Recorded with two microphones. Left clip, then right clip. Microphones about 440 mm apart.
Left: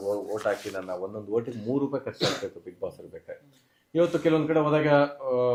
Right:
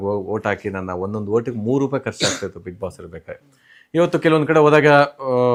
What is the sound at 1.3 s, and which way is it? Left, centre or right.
Speech, right.